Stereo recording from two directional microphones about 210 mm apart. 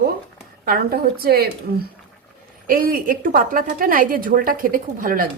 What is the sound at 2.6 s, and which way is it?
A woman's voice, 40° right (ahead or behind).